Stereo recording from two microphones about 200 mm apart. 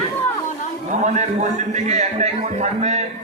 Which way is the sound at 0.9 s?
35° right (ahead or behind).